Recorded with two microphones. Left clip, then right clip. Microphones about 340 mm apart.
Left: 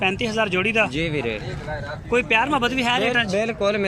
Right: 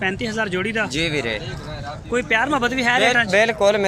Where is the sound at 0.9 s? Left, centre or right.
Right.